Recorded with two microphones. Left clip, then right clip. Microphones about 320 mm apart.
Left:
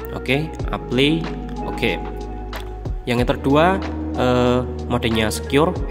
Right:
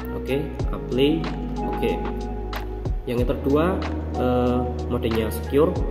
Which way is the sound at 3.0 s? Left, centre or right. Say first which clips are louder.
Left 4 dB; left.